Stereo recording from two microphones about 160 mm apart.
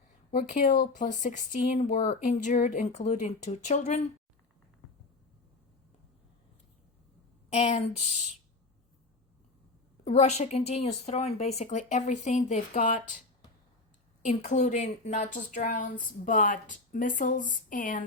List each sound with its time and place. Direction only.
0.3 s a woman's voice: 55° left (ahead or behind)
7.5 s a woman's voice: 45° left (ahead or behind)
10.0 s a woman's voice: 45° left (ahead or behind)
14.3 s a woman's voice: 50° left (ahead or behind)